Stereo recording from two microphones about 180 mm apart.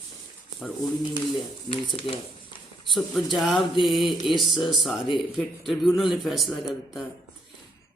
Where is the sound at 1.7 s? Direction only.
30° left (ahead or behind).